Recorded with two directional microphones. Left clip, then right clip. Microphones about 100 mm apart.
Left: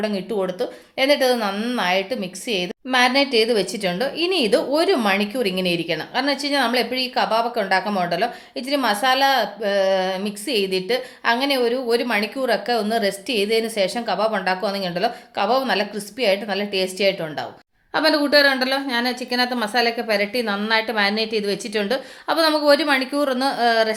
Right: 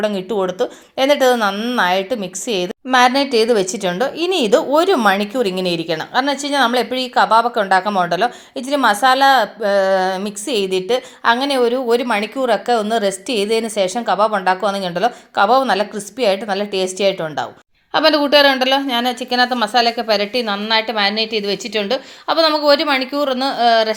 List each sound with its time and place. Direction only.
0.0 s speech: 50° right (ahead or behind)
1.8 s a woman's voice: 60° right (ahead or behind); by 20.4 s 30° right (ahead or behind)
20.7 s a woman's voice: 10° right (ahead or behind)